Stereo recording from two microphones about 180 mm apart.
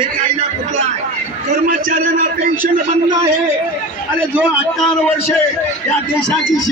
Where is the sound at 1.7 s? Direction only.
50° right (ahead or behind).